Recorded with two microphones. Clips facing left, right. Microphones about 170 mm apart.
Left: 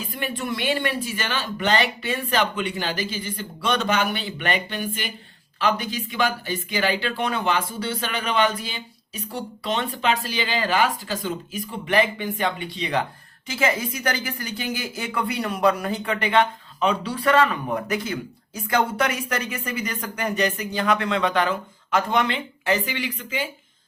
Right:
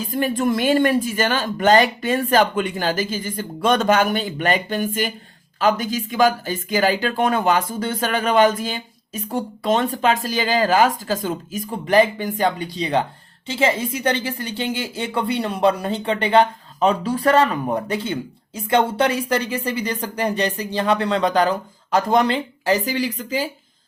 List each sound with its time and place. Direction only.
0.0 s speech: 40° right (ahead or behind)